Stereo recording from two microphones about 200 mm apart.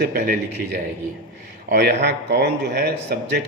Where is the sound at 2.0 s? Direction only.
55° right (ahead or behind).